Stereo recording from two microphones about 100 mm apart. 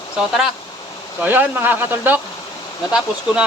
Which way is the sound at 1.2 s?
20° right (ahead or behind).